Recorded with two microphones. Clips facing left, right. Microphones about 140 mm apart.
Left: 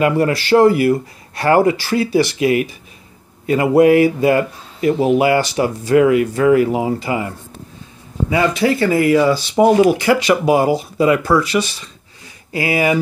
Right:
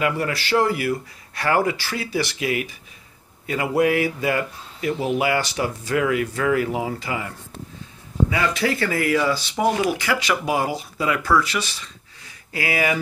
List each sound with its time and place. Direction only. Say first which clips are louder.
0.0 s speech: left 8 dB; 40° left (ahead or behind); by 13.0 s 25° left (ahead or behind)